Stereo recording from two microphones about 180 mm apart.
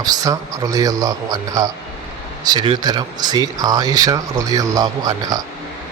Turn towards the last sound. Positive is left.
turn(degrees=-20)  # may be behind; listen again after turning